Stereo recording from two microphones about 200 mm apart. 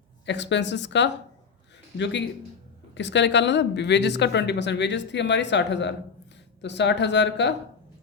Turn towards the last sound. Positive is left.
turn(degrees=60)  # may be behind; listen again after turning